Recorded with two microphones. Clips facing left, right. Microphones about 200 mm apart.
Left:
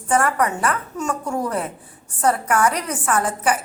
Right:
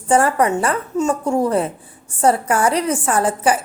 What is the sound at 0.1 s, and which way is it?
A woman's voice, 30° right (ahead or behind).